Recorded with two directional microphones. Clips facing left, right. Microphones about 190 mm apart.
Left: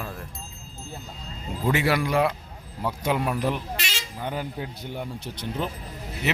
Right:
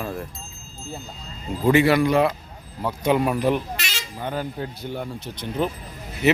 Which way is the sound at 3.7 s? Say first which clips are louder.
Even; 30° left (ahead or behind).